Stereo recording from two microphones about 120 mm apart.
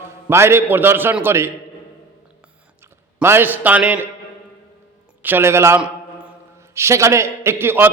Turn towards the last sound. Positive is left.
turn(degrees=-20)  # may be behind; listen again after turning